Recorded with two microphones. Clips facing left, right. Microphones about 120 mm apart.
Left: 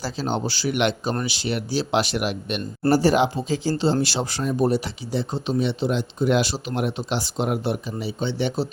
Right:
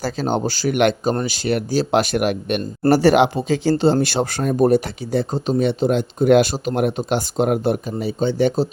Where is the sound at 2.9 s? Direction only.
65° right (ahead or behind).